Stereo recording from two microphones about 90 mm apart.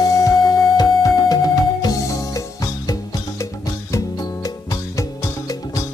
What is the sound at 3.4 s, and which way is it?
Music, 35° left (ahead or behind).